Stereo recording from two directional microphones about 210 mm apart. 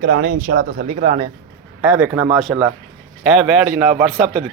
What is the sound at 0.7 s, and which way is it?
Speech, 35° right (ahead or behind).